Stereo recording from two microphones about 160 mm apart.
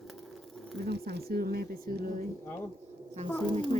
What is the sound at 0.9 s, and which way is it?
Speech, 85° right.